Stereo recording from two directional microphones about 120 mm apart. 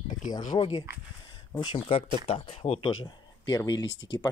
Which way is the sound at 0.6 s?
45° left (ahead or behind).